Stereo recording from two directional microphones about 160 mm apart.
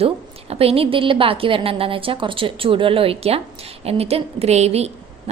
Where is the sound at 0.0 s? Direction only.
40° right (ahead or behind).